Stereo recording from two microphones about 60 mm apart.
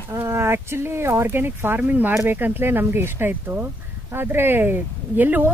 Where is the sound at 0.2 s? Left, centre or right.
Right.